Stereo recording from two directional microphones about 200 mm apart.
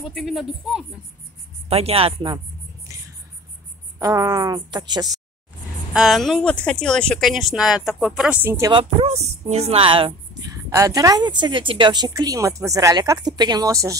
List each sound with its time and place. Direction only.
0.0 s speech: centre (ahead or behind)
1.7 s speech: 30° right (ahead or behind)
4.0 s a woman's voice: 15° right (ahead or behind)
5.9 s speech: centre (ahead or behind)
8.7 s speech: 30° right (ahead or behind); by 13.9 s 15° right (ahead or behind)